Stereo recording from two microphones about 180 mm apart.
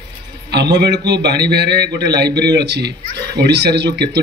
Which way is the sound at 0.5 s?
70° right (ahead or behind).